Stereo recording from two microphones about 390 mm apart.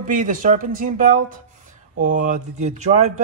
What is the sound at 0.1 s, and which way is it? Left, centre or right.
Speech, centre.